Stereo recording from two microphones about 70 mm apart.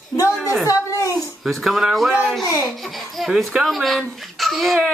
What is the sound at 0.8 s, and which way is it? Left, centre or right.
Speech, left.